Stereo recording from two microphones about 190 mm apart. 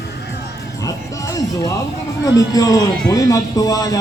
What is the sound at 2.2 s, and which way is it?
Speech, 20° left (ahead or behind).